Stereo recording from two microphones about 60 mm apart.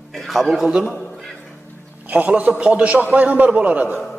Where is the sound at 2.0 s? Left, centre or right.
Right.